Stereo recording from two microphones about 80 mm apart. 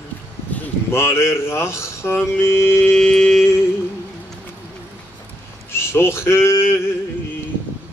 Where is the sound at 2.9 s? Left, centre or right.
Centre.